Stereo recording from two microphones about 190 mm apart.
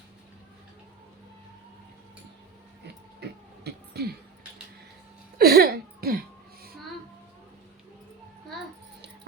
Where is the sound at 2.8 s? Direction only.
60° right (ahead or behind).